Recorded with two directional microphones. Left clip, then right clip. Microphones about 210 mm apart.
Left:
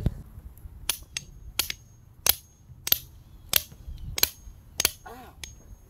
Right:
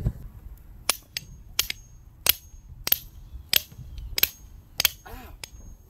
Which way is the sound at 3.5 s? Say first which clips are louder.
Right 3 dB; 10° right (ahead or behind).